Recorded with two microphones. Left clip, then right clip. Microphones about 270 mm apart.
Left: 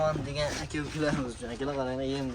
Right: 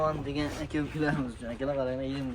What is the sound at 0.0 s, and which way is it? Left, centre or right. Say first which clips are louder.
Speech: left 1 dB; centre.